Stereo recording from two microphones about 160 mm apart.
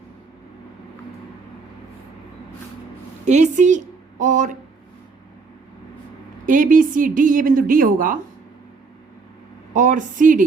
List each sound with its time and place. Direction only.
3.2 s a woman's voice: 50° right (ahead or behind)
6.4 s speech: 55° right (ahead or behind)
9.7 s a woman's voice: 50° right (ahead or behind)